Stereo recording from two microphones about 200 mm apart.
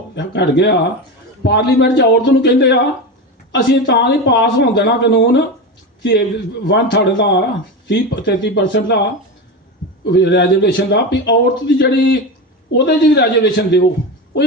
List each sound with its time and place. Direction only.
0.2 s a man's voice: 60° left (ahead or behind)
10.1 s a man's voice: 60° left (ahead or behind)